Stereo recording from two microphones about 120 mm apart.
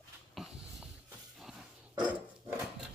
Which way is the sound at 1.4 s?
5° right (ahead or behind).